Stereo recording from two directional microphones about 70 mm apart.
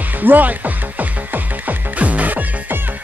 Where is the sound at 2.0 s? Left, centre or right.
Right.